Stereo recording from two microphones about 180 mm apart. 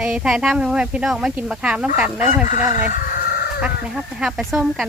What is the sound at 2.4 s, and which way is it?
Speech, 45° left (ahead or behind).